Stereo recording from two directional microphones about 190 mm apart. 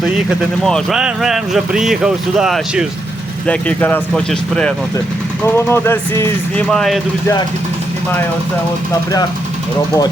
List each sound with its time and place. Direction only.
0.0 s speech: centre (ahead or behind)
6.7 s speech: centre (ahead or behind)